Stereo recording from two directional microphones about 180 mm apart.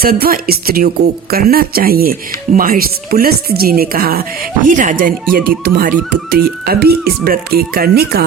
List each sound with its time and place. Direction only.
0.0 s speech: 55° right (ahead or behind)